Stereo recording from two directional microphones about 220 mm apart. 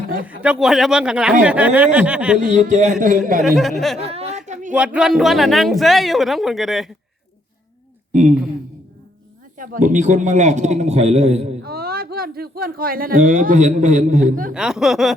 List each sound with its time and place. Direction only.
0.3 s speech: 5° right (ahead or behind)
2.4 s a man's voice: 35° right (ahead or behind)
3.4 s speech: centre (ahead or behind)
3.9 s a woman's voice: 25° right (ahead or behind)
4.4 s a sound: 35° right (ahead or behind)
4.7 s speech: 5° right (ahead or behind)
8.1 s a man's voice: 35° right (ahead or behind)
9.6 s a man's voice: 35° right (ahead or behind)
11.6 s speech: 45° right (ahead or behind)
14.5 s speech: 5° right (ahead or behind)